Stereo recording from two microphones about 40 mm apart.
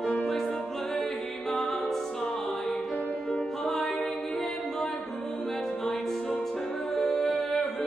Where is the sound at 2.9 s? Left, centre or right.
Left.